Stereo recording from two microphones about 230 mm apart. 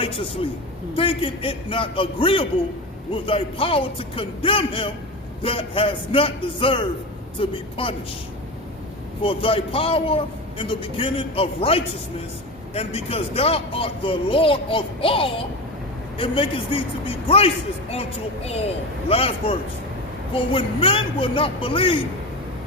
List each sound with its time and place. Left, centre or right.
0.9 s speech: left
9.2 s speech: left
19.0 s speech: left